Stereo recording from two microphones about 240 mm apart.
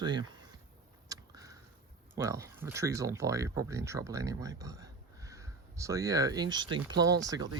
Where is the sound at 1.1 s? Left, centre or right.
Centre.